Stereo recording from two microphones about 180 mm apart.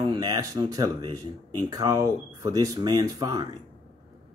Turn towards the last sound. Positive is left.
turn(degrees=-25)  # may be behind; listen again after turning